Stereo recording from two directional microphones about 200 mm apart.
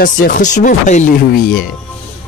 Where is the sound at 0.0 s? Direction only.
45° left (ahead or behind).